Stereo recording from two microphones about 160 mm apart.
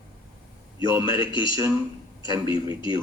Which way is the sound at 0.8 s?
30° left (ahead or behind).